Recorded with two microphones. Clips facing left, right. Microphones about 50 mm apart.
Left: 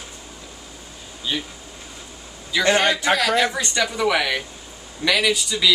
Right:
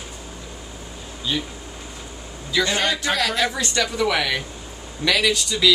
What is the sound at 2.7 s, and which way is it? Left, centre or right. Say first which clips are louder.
Speech: left 5 dB; left.